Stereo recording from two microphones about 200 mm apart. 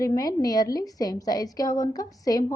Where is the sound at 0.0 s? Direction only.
15° left (ahead or behind).